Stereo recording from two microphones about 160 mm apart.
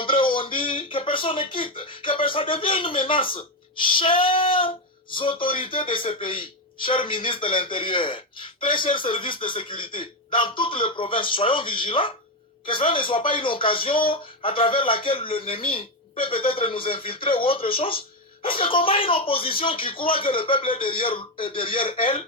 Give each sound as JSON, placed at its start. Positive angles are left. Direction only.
{"t": 0.0, "sound": "speech", "side_deg": 30}
{"t": 3.8, "sound": "female singing", "side_deg": 30}
{"t": 5.1, "sound": "speech", "side_deg": 30}